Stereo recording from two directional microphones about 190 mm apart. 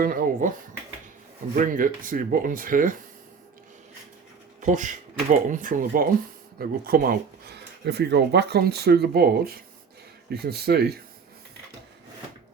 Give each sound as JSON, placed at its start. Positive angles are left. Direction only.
{"t": 0.0, "sound": "speech", "side_deg": -50}
{"t": 1.5, "sound": "speech", "side_deg": -45}
{"t": 4.6, "sound": "speech", "side_deg": -40}